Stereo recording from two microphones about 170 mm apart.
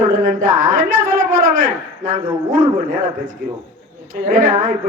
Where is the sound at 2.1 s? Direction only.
50° right (ahead or behind).